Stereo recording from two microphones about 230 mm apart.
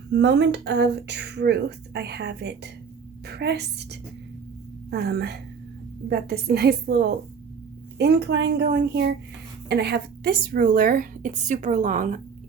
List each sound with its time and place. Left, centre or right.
0.1 s speech: right
4.9 s speech: right